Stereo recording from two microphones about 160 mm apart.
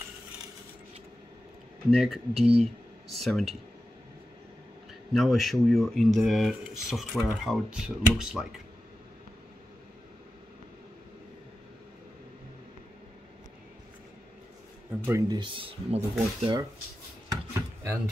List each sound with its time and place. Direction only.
1.9 s speech: centre (ahead or behind)
5.1 s speech: centre (ahead or behind)
15.0 s speech: 20° right (ahead or behind); by 16.4 s 40° right (ahead or behind)
17.3 s a sound: 20° right (ahead or behind)